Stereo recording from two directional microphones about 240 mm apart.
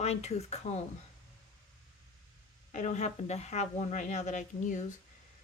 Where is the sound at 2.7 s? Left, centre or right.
Left.